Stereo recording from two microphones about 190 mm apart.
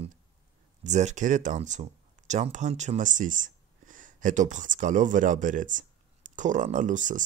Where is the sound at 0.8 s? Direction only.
35° right (ahead or behind).